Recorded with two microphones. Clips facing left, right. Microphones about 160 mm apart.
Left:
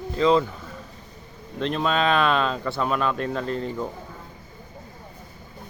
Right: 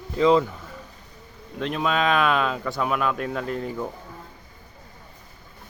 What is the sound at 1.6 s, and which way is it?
Speech, 5° right (ahead or behind).